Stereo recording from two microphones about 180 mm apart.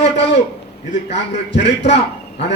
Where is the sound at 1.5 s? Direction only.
70° left (ahead or behind).